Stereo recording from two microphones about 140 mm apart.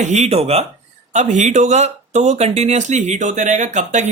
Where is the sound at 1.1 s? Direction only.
60° right (ahead or behind).